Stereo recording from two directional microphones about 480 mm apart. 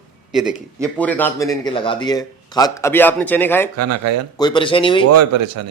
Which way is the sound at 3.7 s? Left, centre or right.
Right.